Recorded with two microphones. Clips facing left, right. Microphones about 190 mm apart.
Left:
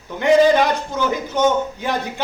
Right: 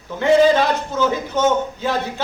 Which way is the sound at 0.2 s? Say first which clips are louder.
Even; 15° left (ahead or behind).